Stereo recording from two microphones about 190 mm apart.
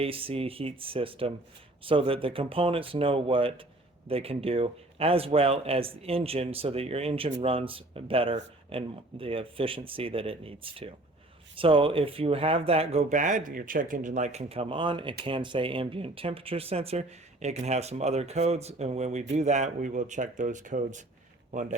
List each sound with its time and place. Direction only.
0.0 s a man's voice: 30° right (ahead or behind)